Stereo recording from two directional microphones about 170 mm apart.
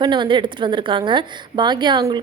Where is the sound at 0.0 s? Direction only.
25° right (ahead or behind).